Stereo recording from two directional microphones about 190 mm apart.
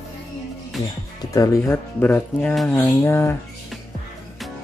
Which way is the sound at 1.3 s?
15° left (ahead or behind).